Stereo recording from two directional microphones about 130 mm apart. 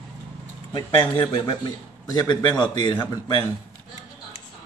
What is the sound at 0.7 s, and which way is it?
A man's voice, 35° left (ahead or behind).